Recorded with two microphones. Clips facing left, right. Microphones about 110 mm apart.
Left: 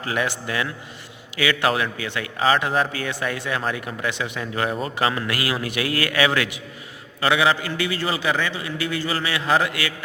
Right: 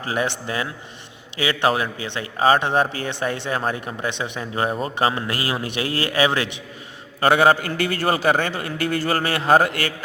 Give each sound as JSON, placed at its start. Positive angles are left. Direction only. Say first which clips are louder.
{"t": 0.0, "sound": "speech", "louder": "right 1 dB", "side_deg": -30}
{"t": 7.2, "sound": "a man's voice", "louder": "right 4 dB", "side_deg": -45}